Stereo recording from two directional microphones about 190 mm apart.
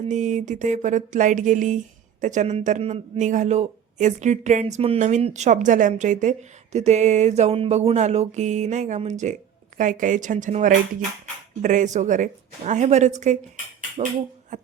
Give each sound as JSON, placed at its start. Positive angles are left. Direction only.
{"t": 0.1, "sound": "a man's voice", "side_deg": -40}
{"t": 14.5, "sound": "music", "side_deg": -40}